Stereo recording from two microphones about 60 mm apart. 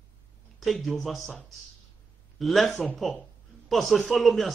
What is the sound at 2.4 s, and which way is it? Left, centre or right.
Speech, centre.